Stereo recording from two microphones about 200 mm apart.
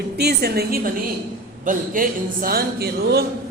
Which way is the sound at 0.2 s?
50° right (ahead or behind).